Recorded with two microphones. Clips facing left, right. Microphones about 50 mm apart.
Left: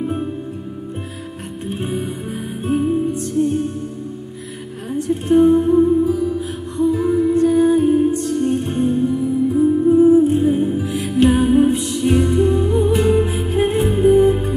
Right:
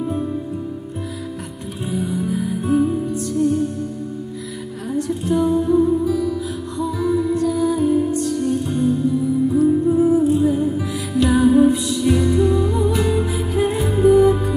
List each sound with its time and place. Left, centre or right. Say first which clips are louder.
1.8 s music: right 3 dB; left
4.9 s music: left 5 dB; left